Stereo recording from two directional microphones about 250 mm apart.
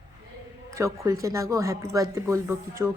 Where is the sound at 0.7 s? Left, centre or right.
Centre.